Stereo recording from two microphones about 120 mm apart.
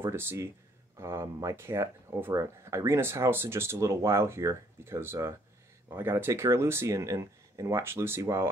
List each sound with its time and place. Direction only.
0.0 s speech: 20° right (ahead or behind)